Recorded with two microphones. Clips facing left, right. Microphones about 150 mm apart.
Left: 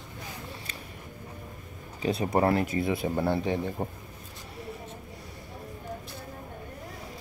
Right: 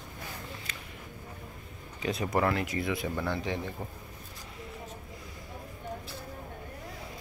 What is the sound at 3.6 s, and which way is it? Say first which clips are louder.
Speech: left 6 dB; 45° left (ahead or behind).